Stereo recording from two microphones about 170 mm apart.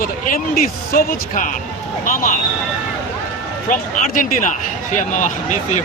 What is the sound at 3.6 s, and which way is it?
Speech, 50° left (ahead or behind).